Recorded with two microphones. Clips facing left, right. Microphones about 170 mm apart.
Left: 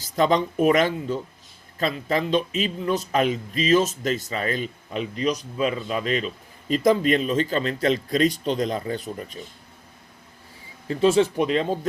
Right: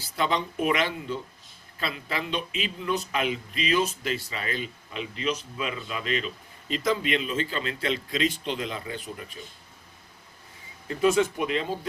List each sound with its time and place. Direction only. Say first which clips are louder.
0.2 s speech: left 7 dB; 40° left (ahead or behind)
10.8 s speech: left 4 dB; 30° left (ahead or behind)